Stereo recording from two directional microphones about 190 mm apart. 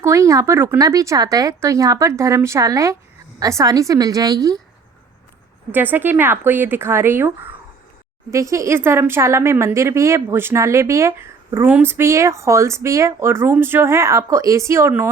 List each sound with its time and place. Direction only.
0.0 s speech: 15° right (ahead or behind)
5.7 s speech: 10° right (ahead or behind)